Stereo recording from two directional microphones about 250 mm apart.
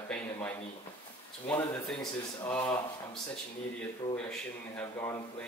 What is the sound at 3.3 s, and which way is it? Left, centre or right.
A man's voice, centre.